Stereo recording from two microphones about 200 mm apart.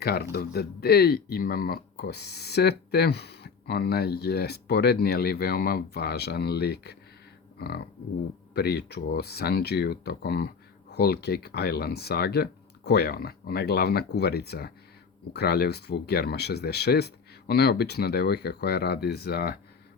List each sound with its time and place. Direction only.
0.0 s speech: 50° left (ahead or behind)